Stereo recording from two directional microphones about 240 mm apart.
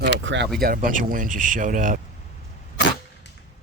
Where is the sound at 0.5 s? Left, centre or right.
Right.